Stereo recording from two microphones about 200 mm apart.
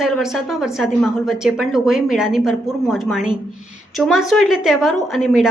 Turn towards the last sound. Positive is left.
turn(degrees=0)  # may be behind; listen again after turning